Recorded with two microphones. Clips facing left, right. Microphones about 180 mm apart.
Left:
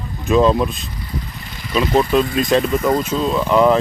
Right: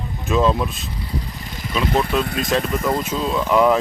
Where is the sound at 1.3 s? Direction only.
45° right (ahead or behind).